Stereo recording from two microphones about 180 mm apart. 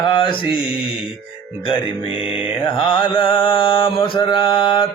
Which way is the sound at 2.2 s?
30° left (ahead or behind).